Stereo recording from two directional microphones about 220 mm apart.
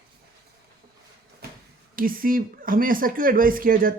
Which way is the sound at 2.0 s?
40° right (ahead or behind).